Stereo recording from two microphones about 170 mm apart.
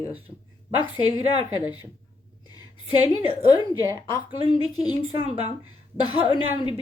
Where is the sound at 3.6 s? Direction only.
25° right (ahead or behind).